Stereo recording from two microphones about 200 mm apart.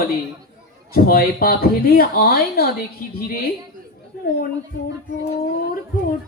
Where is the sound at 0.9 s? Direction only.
50° left (ahead or behind).